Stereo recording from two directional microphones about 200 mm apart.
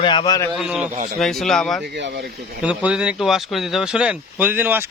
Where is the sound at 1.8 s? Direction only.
60° right (ahead or behind).